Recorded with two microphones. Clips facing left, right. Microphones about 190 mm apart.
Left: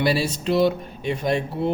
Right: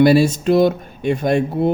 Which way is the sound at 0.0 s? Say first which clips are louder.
Right 10 dB; 50° right (ahead or behind).